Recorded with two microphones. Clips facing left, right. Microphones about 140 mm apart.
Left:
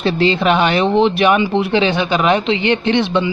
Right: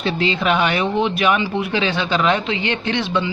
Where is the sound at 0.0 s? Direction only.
35° left (ahead or behind).